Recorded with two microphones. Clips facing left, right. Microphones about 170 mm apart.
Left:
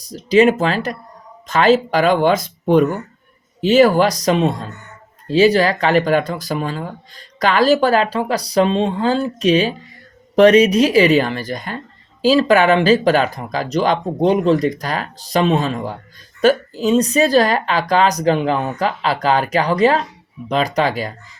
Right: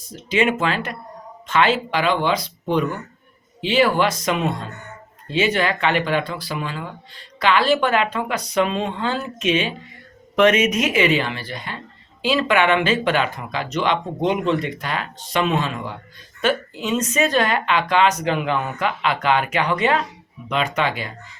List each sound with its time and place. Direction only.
0.0 s speech: 35° left (ahead or behind)